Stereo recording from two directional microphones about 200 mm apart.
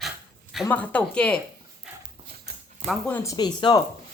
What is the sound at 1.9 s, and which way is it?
Clip-clop, 5° right (ahead or behind).